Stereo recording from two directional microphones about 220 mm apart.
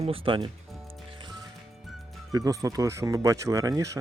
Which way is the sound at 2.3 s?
15° right (ahead or behind).